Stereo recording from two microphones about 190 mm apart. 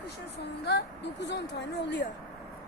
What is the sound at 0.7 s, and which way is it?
Speech, 65° left (ahead or behind).